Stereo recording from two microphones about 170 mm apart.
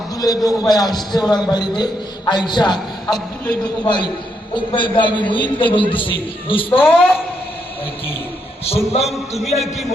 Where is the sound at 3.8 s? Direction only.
25° left (ahead or behind).